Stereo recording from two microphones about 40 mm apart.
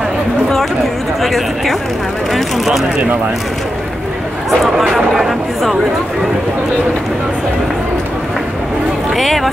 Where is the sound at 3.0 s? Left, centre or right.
Right.